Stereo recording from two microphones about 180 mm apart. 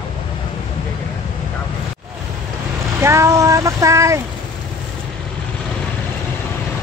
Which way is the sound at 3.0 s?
15° right (ahead or behind).